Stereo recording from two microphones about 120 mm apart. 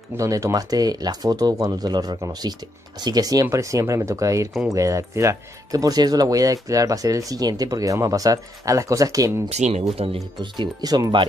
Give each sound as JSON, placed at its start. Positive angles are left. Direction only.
{"t": 0.2, "sound": "speech", "side_deg": -25}
{"t": 9.5, "sound": "speech", "side_deg": -70}
{"t": 10.4, "sound": "speech", "side_deg": -40}